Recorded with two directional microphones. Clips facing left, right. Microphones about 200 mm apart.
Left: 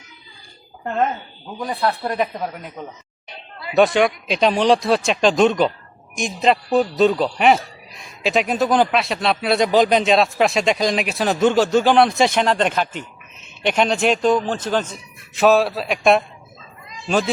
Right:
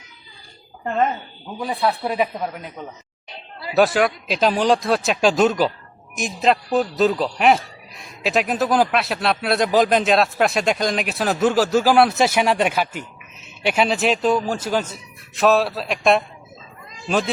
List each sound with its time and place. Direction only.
0.9 s a man's voice: centre (ahead or behind)
3.8 s a man's voice: 5° right (ahead or behind)